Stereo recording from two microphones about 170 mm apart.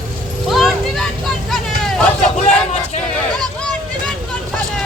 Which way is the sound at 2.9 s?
40° left (ahead or behind).